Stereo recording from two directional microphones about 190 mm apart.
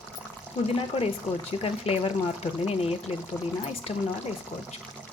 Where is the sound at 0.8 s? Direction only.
30° left (ahead or behind).